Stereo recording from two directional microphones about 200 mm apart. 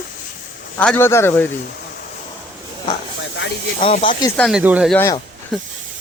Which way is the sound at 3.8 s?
30° left (ahead or behind).